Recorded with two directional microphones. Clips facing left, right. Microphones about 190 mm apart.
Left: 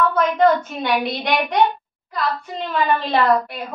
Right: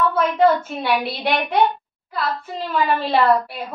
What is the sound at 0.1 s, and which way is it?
A woman's voice, 5° right (ahead or behind).